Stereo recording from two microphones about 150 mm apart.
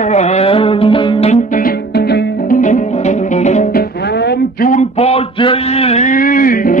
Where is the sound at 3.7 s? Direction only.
85° left; by 4.8 s 70° left (ahead or behind).